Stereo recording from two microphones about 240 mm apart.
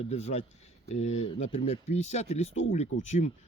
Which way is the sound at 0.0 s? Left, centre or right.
Left.